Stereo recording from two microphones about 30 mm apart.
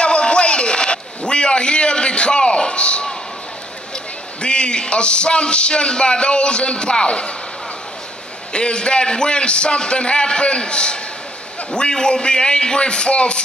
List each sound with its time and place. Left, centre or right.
0.0 s a sound: left
4.4 s music: left
8.5 s music: left